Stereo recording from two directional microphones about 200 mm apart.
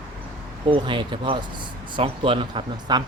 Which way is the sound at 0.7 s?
25° right (ahead or behind).